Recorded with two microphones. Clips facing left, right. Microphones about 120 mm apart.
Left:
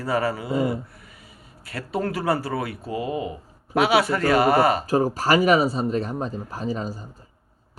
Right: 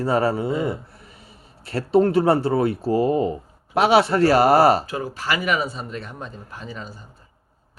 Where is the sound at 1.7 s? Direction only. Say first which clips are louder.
Right 9 dB; 30° right (ahead or behind).